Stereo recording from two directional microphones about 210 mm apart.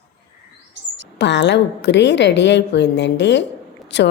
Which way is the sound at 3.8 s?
55° left (ahead or behind).